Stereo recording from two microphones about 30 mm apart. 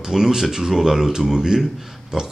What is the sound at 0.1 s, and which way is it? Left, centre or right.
Speech, centre.